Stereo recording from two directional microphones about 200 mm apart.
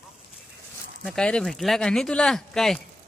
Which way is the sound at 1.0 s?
5° left (ahead or behind).